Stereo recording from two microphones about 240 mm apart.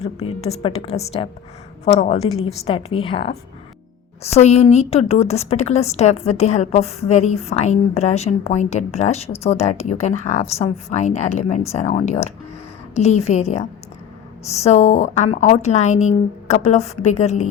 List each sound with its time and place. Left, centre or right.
0.3 s a woman's voice: left